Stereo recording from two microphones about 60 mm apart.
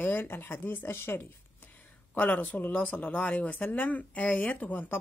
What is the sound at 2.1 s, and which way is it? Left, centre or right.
Speech, left.